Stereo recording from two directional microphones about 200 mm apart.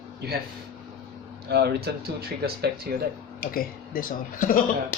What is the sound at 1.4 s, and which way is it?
Speech, 55° right (ahead or behind).